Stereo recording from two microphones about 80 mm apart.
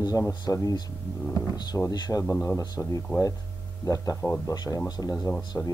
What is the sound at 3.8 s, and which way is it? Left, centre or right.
Speech, left.